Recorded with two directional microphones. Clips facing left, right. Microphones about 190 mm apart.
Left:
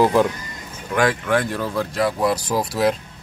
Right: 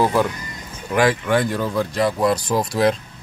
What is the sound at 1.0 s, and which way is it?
Speech, centre (ahead or behind).